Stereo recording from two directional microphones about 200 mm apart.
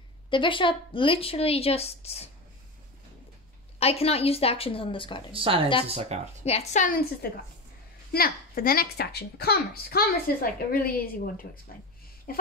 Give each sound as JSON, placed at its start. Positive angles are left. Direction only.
{"t": 0.3, "sound": "a woman's voice", "side_deg": 25}
{"t": 3.8, "sound": "a woman's voice", "side_deg": 30}
{"t": 5.3, "sound": "a woman's voice", "side_deg": -25}
{"t": 6.4, "sound": "a woman's voice", "side_deg": 35}